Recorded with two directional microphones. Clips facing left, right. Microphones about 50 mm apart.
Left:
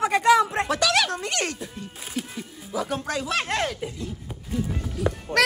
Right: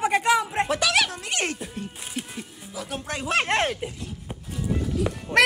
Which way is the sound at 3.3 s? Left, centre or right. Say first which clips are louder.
Right 5 dB; right.